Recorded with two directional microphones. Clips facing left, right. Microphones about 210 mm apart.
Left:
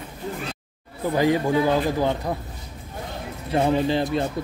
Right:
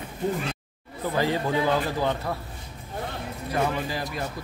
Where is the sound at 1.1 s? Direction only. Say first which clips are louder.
Left 5 dB; 15° left (ahead or behind).